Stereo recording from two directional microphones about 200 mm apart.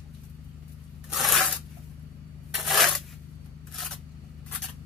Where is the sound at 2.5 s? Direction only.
Centre (ahead or behind).